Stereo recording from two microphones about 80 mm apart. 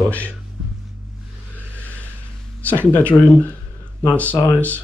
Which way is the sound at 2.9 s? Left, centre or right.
Centre.